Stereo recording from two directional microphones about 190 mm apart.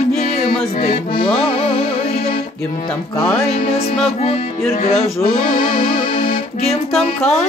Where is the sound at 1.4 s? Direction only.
30° left (ahead or behind).